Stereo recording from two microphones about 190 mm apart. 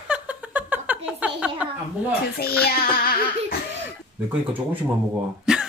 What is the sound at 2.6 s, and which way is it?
Music, 50° left (ahead or behind).